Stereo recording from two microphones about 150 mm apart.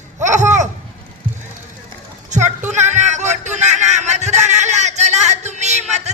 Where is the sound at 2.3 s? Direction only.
50° right (ahead or behind).